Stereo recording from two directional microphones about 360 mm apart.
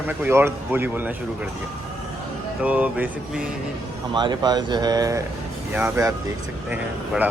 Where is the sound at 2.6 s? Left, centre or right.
Centre.